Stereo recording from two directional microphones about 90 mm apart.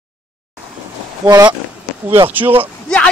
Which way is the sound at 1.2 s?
45° right (ahead or behind).